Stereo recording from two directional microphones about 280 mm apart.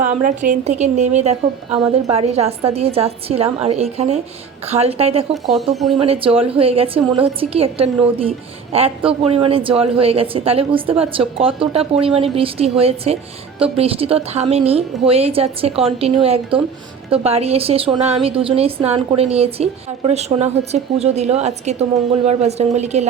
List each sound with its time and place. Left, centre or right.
0.0 s a woman's voice: right
5.5 s speech: centre
6.0 s a woman's voice: centre